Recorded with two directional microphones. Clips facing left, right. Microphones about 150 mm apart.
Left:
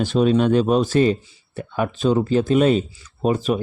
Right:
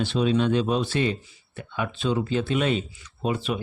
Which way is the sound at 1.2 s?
30° left (ahead or behind).